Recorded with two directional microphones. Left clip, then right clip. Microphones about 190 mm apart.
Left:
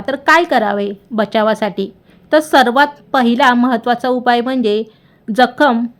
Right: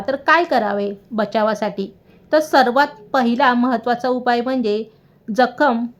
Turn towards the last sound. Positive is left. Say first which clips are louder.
# left 4 dB
turn(degrees=30)  # may be behind; listen again after turning